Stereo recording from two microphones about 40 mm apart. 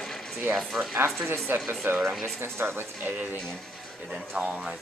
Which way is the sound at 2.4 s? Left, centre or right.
Right.